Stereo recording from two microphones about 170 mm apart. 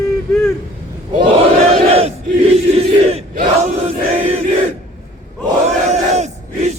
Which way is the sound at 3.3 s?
55° right (ahead or behind).